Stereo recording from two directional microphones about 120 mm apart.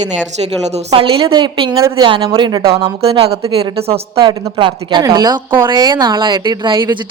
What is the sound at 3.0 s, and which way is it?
A woman's voice, 55° right (ahead or behind).